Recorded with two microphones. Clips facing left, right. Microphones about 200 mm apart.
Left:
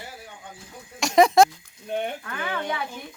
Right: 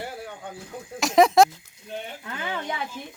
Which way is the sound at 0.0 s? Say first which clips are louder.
Right 7 dB; 60° right (ahead or behind).